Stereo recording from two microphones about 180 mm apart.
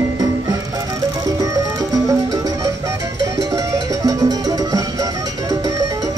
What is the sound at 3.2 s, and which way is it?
Music, 20° right (ahead or behind).